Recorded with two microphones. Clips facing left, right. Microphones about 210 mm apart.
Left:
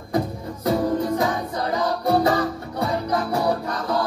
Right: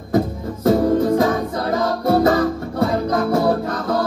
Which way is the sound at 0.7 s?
50° right (ahead or behind).